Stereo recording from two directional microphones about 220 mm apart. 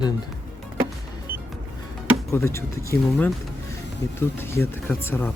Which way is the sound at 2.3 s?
10° left (ahead or behind).